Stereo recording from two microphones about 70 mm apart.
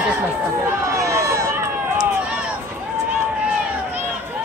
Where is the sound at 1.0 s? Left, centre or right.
Right.